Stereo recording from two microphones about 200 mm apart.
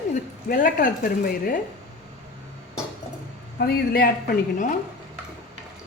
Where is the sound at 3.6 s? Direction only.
50° left (ahead or behind).